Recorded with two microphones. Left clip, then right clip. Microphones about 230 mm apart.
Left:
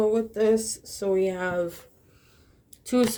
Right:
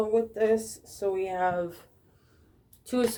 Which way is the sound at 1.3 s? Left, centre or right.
Left.